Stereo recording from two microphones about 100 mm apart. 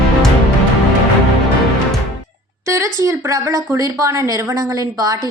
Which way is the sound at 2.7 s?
30° right (ahead or behind).